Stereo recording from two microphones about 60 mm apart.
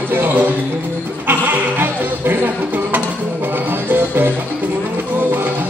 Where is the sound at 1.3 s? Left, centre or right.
Right.